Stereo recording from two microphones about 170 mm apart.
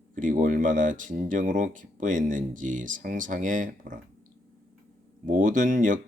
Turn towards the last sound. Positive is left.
turn(degrees=-50)  # may be behind; listen again after turning